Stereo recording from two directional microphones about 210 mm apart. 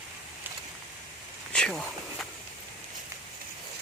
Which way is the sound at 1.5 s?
5° left (ahead or behind).